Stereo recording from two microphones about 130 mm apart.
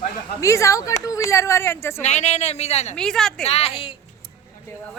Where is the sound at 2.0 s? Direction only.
65° left (ahead or behind).